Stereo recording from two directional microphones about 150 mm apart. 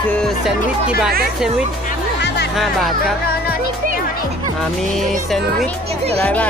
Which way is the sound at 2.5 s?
Centre (ahead or behind).